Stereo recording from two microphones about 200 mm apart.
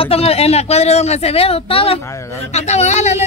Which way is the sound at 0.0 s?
30° left (ahead or behind).